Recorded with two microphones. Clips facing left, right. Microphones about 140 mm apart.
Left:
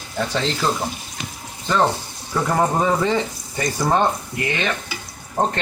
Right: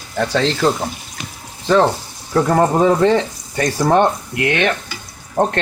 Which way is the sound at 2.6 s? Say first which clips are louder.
Right 5 dB; 70° right (ahead or behind).